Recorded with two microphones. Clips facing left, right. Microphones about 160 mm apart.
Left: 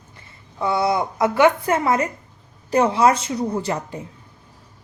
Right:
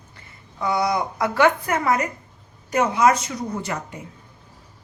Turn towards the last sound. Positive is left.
turn(degrees=30)  # may be behind; listen again after turning